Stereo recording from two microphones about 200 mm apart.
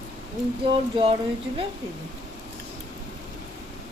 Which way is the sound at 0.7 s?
25° right (ahead or behind).